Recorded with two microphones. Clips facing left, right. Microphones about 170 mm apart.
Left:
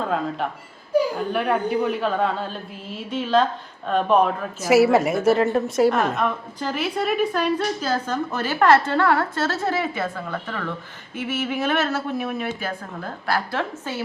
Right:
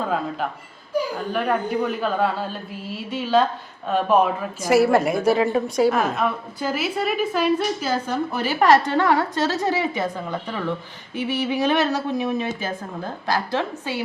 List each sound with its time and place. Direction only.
1.3 s a woman's voice: centre (ahead or behind); by 14.0 s 15° right (ahead or behind)